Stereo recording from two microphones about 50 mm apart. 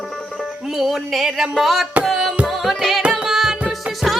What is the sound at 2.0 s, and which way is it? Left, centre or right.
Music, centre.